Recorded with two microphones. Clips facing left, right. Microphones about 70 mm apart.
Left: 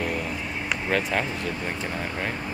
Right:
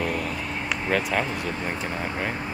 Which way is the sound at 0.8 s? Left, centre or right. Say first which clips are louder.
Right 1 dB; centre.